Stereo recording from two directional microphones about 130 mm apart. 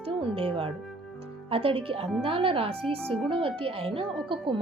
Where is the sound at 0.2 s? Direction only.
45° right (ahead or behind).